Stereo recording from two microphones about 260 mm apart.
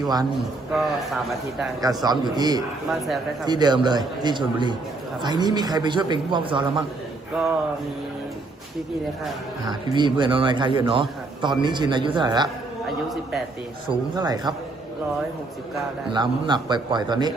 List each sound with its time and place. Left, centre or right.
0.0 s speech: centre
0.3 s a man's voice: centre
1.8 s speech: centre
7.4 s a man's voice: centre
9.6 s speech: centre
13.8 s speech: centre
16.0 s speech: centre